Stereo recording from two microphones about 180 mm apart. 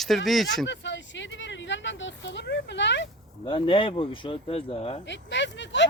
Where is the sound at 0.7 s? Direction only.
85° left.